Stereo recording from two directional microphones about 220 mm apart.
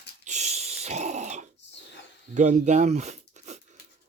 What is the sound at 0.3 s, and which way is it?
Dog, 30° right (ahead or behind).